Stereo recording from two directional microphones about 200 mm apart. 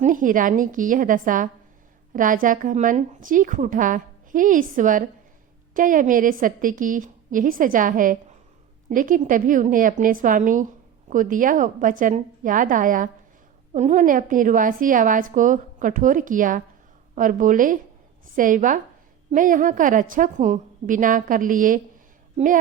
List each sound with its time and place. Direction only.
0.0 s a woman's voice: 40° right (ahead or behind)